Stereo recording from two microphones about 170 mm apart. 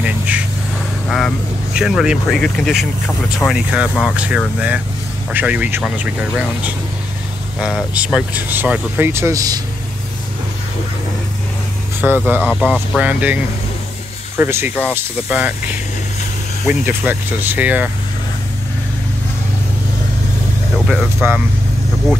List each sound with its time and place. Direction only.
1.0 s speech: centre (ahead or behind); by 9.6 s 20° right (ahead or behind)
12.0 s speech: 10° right (ahead or behind)
12.4 s speech: 5° left (ahead or behind)
12.9 s speech: 10° right (ahead or behind)
16.6 s speech: 10° right (ahead or behind)
20.8 s speech: 5° right (ahead or behind)